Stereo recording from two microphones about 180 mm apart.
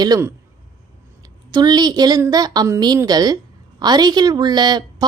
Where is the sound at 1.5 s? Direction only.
25° right (ahead or behind).